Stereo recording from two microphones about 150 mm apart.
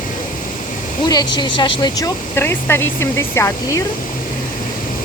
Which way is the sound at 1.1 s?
30° left (ahead or behind).